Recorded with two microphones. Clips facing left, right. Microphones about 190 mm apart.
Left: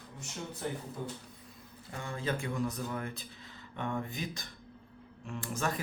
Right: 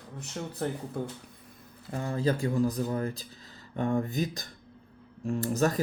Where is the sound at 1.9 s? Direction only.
40° right (ahead or behind).